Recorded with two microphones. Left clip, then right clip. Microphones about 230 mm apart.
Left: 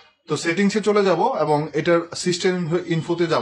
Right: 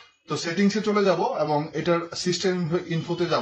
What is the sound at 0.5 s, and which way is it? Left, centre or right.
Speech, left.